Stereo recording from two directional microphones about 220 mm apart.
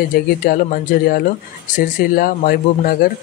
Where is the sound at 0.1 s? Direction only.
40° left (ahead or behind).